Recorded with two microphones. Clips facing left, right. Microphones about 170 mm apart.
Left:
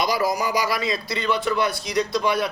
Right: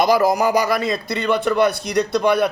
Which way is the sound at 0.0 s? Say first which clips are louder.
Right 7 dB; 50° right (ahead or behind).